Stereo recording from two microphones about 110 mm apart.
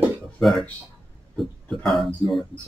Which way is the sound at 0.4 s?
Centre (ahead or behind).